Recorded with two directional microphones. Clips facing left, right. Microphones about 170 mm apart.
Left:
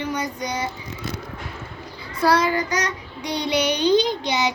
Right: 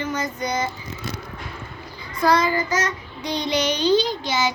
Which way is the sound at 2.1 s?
10° left (ahead or behind).